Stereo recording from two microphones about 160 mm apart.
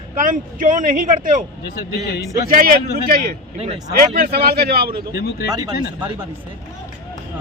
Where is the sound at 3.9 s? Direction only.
75° right (ahead or behind).